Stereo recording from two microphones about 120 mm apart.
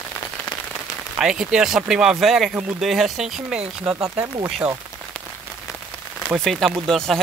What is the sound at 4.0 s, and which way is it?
Speech, 25° right (ahead or behind).